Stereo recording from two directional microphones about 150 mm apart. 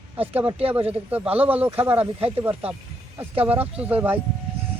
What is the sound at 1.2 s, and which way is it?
Speech, 40° right (ahead or behind).